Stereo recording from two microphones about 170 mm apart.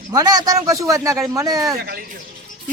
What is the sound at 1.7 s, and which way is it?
Speech, 65° right (ahead or behind).